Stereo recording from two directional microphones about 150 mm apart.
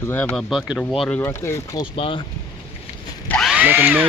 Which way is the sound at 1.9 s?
35° left (ahead or behind).